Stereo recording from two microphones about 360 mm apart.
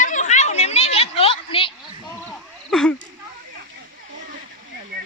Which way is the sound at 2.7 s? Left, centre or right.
Centre.